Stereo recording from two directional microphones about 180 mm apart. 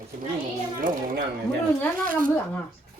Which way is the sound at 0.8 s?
50° right (ahead or behind).